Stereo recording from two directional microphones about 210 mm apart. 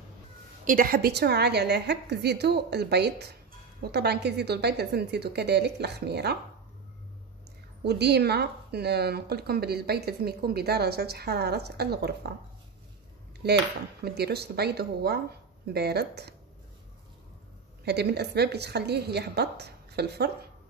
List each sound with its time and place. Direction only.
0.7 s speech: 45° right (ahead or behind)
7.8 s speech: 50° right (ahead or behind)
13.4 s speech: 50° right (ahead or behind)
17.8 s speech: 50° right (ahead or behind)